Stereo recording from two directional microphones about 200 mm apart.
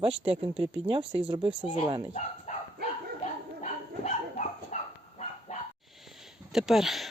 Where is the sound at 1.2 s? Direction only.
25° right (ahead or behind).